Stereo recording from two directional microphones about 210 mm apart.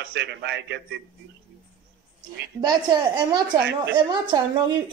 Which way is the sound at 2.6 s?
20° right (ahead or behind).